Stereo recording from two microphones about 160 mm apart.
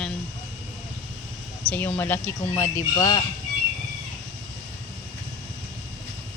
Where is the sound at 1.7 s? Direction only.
10° left (ahead or behind).